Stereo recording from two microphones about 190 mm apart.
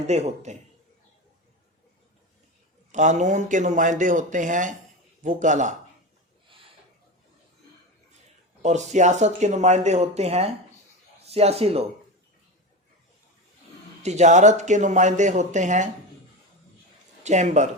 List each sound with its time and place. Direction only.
0.1 s speech: 35° right (ahead or behind)
2.9 s speech: 40° right (ahead or behind)
8.6 s speech: 40° right (ahead or behind)
14.0 s speech: 40° right (ahead or behind)
17.2 s speech: 40° right (ahead or behind)